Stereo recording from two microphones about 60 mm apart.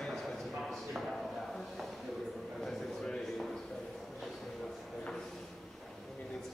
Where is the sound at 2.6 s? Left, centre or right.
Centre.